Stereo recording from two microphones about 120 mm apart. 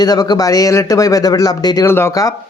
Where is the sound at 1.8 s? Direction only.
20° left (ahead or behind).